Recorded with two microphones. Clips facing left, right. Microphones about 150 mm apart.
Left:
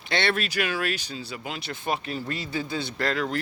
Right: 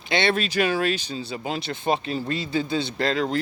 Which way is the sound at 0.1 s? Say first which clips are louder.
Right 3 dB; 20° right (ahead or behind).